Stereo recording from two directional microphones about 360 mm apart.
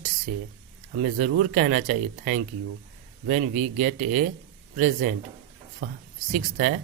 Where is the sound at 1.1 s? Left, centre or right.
Right.